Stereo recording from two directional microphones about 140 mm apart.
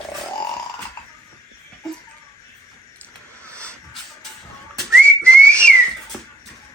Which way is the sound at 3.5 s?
10° left (ahead or behind).